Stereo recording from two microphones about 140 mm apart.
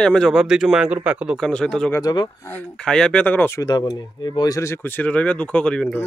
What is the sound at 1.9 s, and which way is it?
Speech, 30° left (ahead or behind).